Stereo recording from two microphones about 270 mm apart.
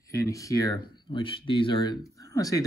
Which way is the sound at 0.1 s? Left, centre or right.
Centre.